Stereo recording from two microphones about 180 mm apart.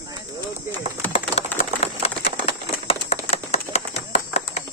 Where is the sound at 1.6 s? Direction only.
35° left (ahead or behind).